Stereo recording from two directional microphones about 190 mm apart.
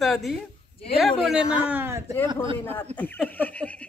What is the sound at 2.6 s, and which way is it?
Speech, 10° left (ahead or behind).